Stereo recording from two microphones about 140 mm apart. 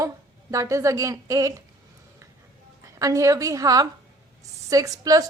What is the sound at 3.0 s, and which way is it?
A woman's voice, 25° right (ahead or behind).